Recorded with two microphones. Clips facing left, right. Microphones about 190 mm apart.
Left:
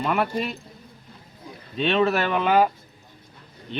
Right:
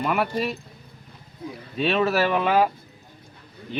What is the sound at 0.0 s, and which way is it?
Speech, 5° right (ahead or behind).